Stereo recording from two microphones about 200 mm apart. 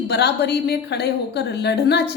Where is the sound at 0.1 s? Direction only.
55° left (ahead or behind).